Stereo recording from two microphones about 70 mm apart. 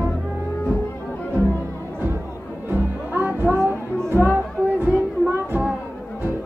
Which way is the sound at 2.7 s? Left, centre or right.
Right.